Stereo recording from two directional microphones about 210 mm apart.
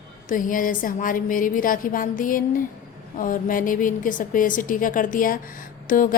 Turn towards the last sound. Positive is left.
turn(degrees=40)  # may be behind; listen again after turning